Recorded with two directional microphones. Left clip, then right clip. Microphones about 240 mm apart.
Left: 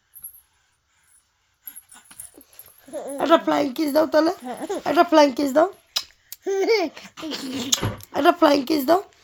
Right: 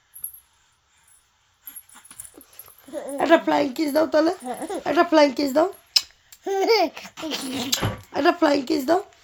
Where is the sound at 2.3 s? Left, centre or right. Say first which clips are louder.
Right 2 dB; centre.